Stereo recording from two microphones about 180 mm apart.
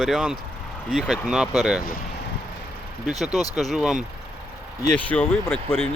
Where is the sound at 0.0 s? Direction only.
5° right (ahead or behind).